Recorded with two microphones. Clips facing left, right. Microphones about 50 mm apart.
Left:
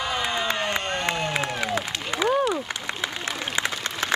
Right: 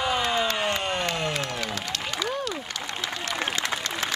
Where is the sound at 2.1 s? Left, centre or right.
Left.